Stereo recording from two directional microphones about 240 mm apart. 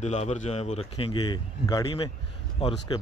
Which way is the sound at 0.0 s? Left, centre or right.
Left.